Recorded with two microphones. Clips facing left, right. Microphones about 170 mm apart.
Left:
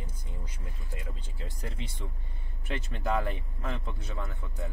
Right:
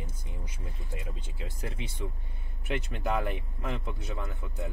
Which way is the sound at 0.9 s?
20° right (ahead or behind).